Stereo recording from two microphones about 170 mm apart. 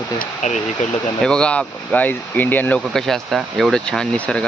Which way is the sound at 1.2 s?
5° left (ahead or behind).